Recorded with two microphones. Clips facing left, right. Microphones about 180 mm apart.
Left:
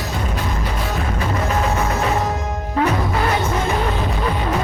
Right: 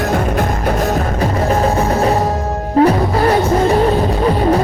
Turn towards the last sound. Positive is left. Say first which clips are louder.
# right 8 dB
turn(degrees=-35)  # may be behind; listen again after turning